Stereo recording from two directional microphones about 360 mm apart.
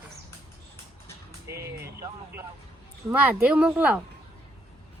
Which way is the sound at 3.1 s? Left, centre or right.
Centre.